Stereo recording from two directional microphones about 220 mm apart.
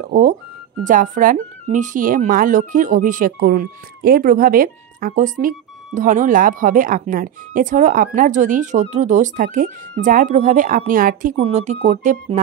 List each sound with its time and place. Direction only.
0.8 s speech: 35° right (ahead or behind)
11.3 s speech: 30° right (ahead or behind)